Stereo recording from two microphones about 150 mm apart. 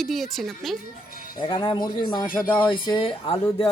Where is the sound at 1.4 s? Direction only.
35° left (ahead or behind).